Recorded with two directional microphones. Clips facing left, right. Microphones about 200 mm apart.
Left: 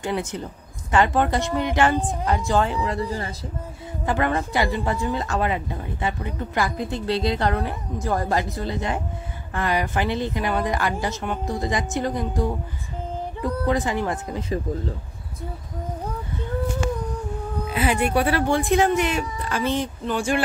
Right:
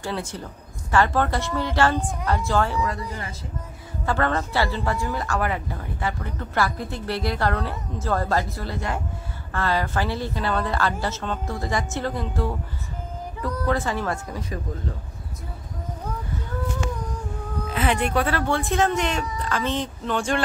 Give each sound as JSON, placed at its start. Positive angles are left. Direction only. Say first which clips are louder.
{"t": 0.0, "sound": "a woman's voice", "louder": "left 3 dB", "side_deg": 20}
{"t": 4.0, "sound": "a woman's voice", "louder": "left 1 dB", "side_deg": 15}
{"t": 13.7, "sound": "a woman's voice", "louder": "left 1 dB", "side_deg": 15}
{"t": 17.7, "sound": "a woman's voice", "louder": "left 1 dB", "side_deg": 10}